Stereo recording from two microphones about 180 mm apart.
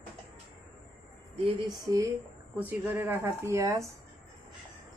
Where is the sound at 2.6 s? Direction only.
10° right (ahead or behind).